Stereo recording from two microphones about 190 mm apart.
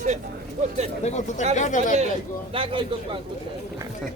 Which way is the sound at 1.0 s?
35° left (ahead or behind).